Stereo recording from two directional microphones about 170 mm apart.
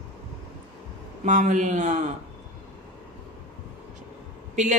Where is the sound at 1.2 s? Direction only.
45° right (ahead or behind).